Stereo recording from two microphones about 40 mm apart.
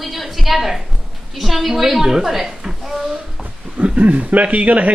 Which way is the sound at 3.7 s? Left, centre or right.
Right.